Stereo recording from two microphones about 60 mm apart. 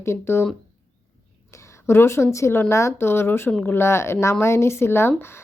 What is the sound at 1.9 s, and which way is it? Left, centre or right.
A woman's voice, left.